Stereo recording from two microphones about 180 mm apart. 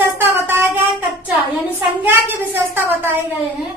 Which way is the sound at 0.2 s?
10° right (ahead or behind).